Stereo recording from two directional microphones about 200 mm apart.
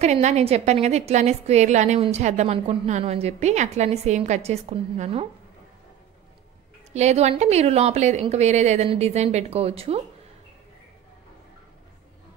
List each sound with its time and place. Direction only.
0.0 s a woman's voice: 35° right (ahead or behind)
6.9 s a woman's voice: 35° right (ahead or behind)